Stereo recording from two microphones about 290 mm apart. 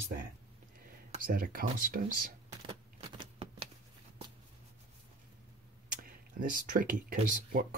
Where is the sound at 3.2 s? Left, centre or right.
Centre.